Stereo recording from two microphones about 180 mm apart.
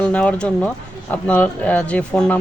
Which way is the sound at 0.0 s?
5° left (ahead or behind).